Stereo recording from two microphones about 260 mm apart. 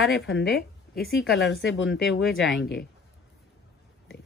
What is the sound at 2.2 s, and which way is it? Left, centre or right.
Speech, centre.